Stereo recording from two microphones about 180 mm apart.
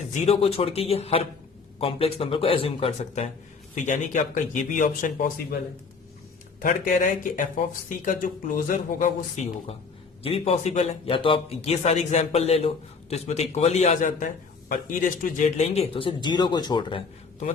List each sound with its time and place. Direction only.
0.1 s speech: 35° left (ahead or behind)
6.6 s speech: 55° left (ahead or behind); by 17.0 s 25° left (ahead or behind)